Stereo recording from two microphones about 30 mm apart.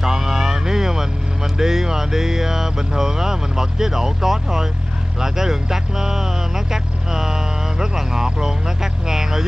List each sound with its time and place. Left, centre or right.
0.0 s a sound: centre
1.6 s speech: centre
5.2 s vehicle: centre